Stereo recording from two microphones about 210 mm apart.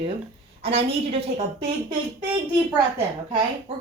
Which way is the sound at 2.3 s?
20° right (ahead or behind).